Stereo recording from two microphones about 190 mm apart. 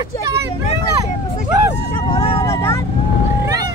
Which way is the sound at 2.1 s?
30° left (ahead or behind).